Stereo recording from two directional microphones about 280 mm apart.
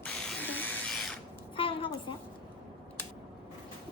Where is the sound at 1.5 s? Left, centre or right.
Centre.